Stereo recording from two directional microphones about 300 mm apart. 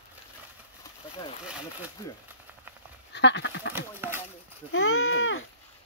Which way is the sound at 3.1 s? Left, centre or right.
Left.